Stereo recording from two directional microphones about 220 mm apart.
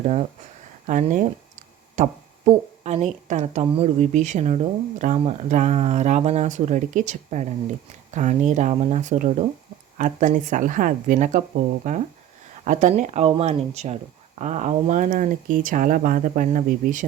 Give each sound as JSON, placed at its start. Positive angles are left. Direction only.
{"t": 0.0, "sound": "speech", "side_deg": -30}